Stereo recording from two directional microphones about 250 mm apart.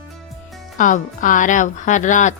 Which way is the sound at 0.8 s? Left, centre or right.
Left.